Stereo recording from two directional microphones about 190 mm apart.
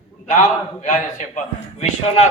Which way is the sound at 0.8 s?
40° left (ahead or behind).